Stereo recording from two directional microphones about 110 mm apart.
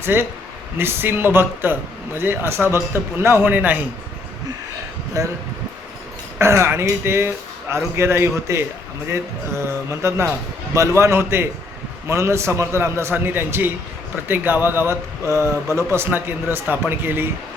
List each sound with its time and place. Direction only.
0.0 s speech: 20° right (ahead or behind)
5.2 s speech: 30° right (ahead or behind)
6.4 s speech: 25° right (ahead or behind)